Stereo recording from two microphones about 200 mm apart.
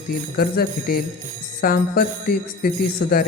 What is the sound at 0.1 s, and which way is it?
Speech, 50° left (ahead or behind).